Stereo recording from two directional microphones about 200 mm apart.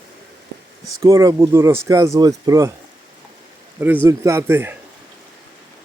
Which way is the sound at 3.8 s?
10° right (ahead or behind).